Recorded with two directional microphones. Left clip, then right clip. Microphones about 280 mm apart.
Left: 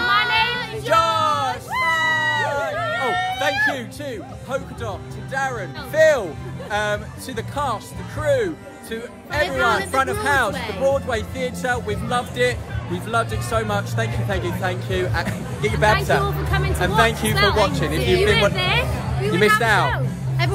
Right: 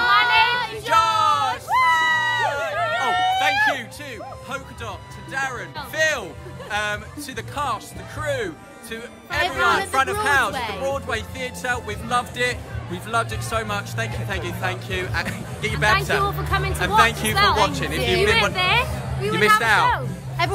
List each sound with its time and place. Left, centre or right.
0.0 s child singing: centre
0.8 s a sound: centre
1.9 s a sound: centre
3.7 s music: centre
9.4 s speech: centre
10.2 s music: centre
10.5 s speech: centre
10.8 s music: centre
17.7 s music: centre
18.3 s speech: centre
20.4 s speech: centre